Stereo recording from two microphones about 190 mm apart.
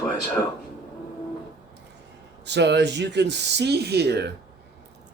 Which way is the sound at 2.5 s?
65° right (ahead or behind).